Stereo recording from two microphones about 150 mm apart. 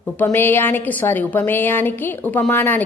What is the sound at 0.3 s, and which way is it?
A woman's voice, 15° left (ahead or behind).